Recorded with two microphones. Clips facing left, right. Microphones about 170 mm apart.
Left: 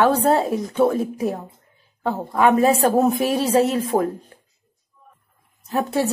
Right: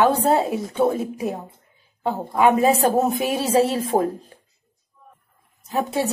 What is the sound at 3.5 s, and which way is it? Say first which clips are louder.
Speech: right 2 dB; 30° right (ahead or behind).